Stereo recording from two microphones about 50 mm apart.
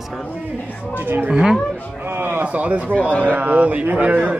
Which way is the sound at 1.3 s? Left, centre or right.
Centre.